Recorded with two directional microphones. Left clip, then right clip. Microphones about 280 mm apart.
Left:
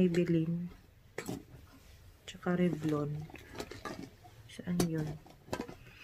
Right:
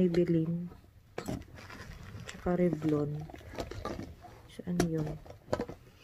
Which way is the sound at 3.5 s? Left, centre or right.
Right.